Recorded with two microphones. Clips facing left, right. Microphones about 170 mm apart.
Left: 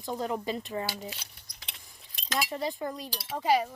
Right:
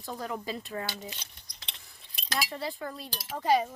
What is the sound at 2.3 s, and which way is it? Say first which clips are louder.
Speech: left 2 dB; 20° left (ahead or behind).